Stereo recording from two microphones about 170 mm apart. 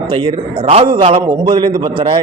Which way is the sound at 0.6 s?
40° right (ahead or behind).